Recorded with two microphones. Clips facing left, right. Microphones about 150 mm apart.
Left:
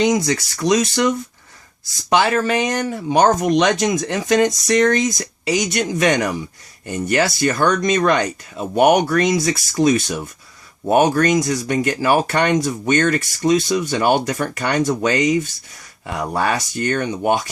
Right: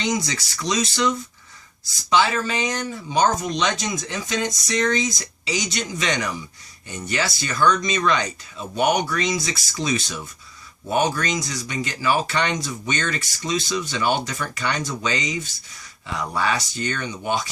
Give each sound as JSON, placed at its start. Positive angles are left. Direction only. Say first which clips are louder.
{"t": 0.0, "sound": "speech", "louder": "left 8 dB", "side_deg": 55}